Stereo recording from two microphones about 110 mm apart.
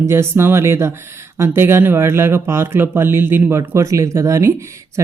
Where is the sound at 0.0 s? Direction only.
25° right (ahead or behind).